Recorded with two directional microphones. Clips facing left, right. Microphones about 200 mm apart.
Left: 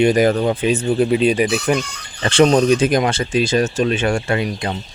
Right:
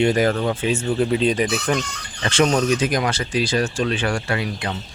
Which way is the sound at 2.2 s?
30° left (ahead or behind).